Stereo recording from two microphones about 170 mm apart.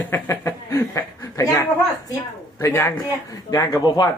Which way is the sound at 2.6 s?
15° left (ahead or behind).